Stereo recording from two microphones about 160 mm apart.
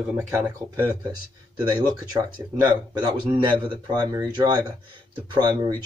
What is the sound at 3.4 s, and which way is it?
Speech, 30° right (ahead or behind).